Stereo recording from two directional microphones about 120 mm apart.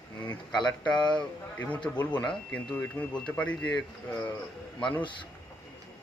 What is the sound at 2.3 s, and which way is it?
Speech, 15° left (ahead or behind).